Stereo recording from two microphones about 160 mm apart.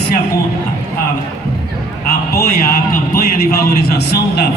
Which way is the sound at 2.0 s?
70° left (ahead or behind).